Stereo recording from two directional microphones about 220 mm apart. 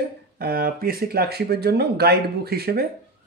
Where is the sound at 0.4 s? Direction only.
45° right (ahead or behind).